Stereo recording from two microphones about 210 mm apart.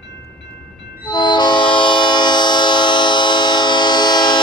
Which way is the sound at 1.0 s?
20° left (ahead or behind).